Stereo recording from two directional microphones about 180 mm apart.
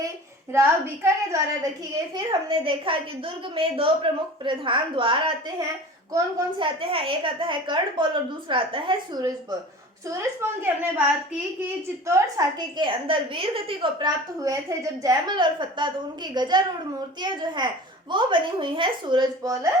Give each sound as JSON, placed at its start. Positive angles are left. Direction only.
{"t": 0.5, "sound": "a woman's voice", "side_deg": -15}
{"t": 2.1, "sound": "a woman's voice", "side_deg": -25}
{"t": 12.0, "sound": "a woman's voice", "side_deg": -15}